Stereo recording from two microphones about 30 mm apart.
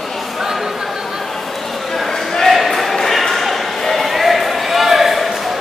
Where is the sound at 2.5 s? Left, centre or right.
Centre.